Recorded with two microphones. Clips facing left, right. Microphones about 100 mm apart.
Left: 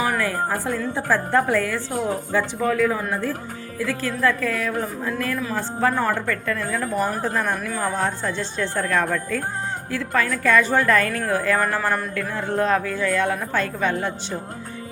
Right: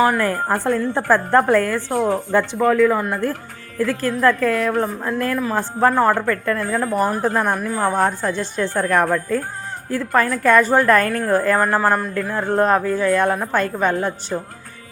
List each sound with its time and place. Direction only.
0.2 s a woman's voice: 50° right (ahead or behind)
9.9 s a woman's voice: 45° right (ahead or behind)